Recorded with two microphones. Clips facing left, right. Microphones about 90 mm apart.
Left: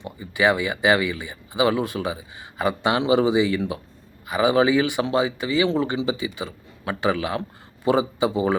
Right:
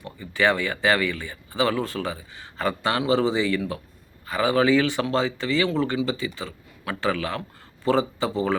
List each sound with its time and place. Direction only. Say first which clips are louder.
0.0 s speech: left 2 dB; 15° left (ahead or behind)